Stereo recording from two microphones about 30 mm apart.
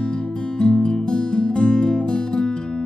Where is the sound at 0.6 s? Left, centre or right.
Left.